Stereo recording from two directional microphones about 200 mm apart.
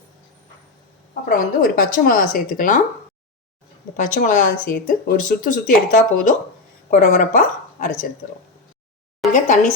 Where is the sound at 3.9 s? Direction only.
40° left (ahead or behind).